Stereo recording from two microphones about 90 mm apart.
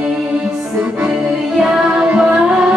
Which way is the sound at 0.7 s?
10° right (ahead or behind).